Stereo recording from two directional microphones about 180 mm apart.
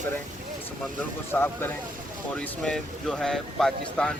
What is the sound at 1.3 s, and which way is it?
Speech, 10° left (ahead or behind).